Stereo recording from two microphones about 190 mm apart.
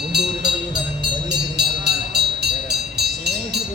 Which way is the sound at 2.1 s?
60° right (ahead or behind).